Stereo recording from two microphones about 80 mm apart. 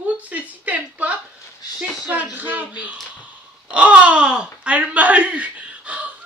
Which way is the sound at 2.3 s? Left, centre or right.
Right.